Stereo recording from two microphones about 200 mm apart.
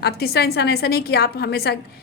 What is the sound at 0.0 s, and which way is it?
A woman's voice, 55° left (ahead or behind).